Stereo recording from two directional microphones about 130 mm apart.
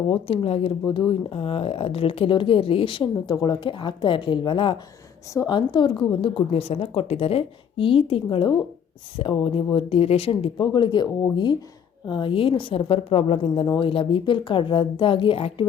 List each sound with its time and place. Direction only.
0.1 s a woman's voice: 45° left (ahead or behind)
0.9 s a woman's voice: 35° left (ahead or behind)